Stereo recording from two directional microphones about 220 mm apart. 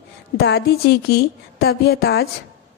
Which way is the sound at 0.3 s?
50° left (ahead or behind).